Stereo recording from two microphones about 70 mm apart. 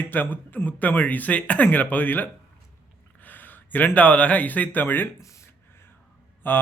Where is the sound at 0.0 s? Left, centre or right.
Left.